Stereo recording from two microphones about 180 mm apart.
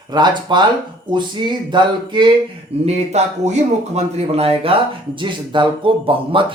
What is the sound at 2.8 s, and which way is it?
A man's voice, 40° right (ahead or behind).